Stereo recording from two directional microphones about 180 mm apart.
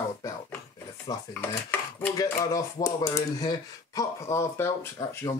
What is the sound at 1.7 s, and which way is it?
Cutlery, 10° left (ahead or behind).